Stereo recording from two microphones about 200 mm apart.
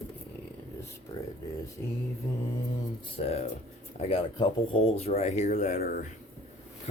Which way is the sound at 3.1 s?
30° left (ahead or behind).